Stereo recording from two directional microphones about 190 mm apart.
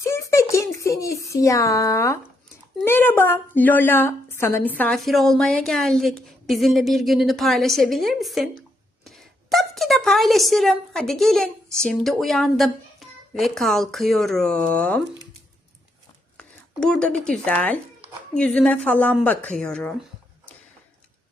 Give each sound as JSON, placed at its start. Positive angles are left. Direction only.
{"t": 0.0, "sound": "a sound", "side_deg": 15}
{"t": 2.8, "sound": "a woman's voice", "side_deg": 10}
{"t": 4.8, "sound": "a woman's voice", "side_deg": 5}
{"t": 16.4, "sound": "a woman's voice", "side_deg": 5}